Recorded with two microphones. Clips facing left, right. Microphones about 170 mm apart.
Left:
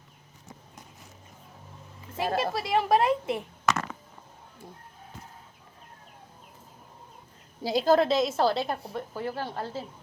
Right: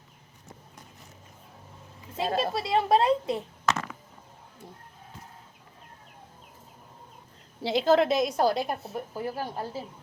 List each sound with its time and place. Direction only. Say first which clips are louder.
2.1 s a woman's voice: even; 20° right (ahead or behind)
7.6 s a woman's voice: even; 25° right (ahead or behind)